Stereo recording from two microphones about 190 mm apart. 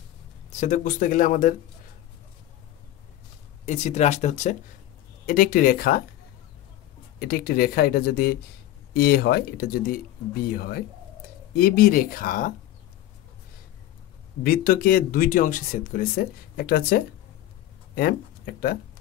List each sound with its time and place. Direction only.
0.5 s speech: 40° left (ahead or behind)
3.6 s speech: 35° left (ahead or behind)
5.2 s speech: 50° left (ahead or behind)
7.2 s speech: 50° left (ahead or behind)
14.4 s speech: 50° left (ahead or behind)